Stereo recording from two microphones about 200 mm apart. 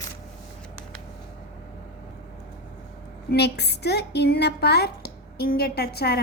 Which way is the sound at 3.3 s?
55° left (ahead or behind).